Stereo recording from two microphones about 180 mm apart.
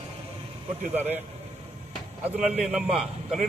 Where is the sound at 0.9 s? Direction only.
10° right (ahead or behind).